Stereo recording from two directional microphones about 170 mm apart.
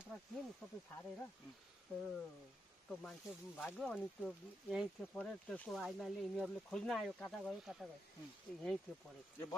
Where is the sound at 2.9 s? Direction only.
5° left (ahead or behind).